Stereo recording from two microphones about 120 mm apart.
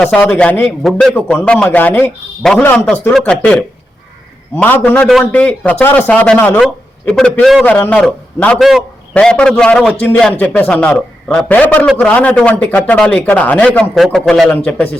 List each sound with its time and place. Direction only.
0.0 s a man's voice: 15° left (ahead or behind)
1.1 s a man's voice: 15° left (ahead or behind)
2.4 s a man's voice: 5° left (ahead or behind)
8.5 s a man's voice: centre (ahead or behind)